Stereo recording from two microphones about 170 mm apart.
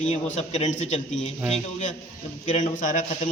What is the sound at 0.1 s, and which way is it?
A man's voice, 40° left (ahead or behind).